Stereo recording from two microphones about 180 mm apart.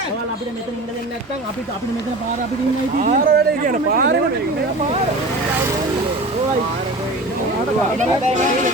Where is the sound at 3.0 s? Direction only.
50° right (ahead or behind).